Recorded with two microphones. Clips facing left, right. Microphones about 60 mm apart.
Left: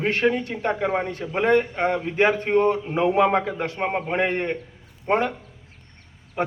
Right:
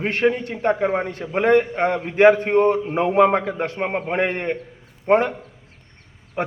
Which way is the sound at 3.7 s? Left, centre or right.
Centre.